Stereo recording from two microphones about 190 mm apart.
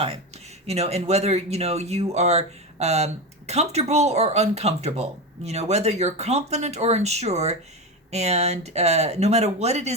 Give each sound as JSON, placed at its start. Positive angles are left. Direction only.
{"t": 0.7, "sound": "speech", "side_deg": -35}